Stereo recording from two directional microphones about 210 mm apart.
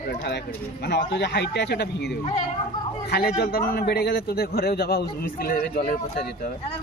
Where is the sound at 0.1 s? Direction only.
50° left (ahead or behind).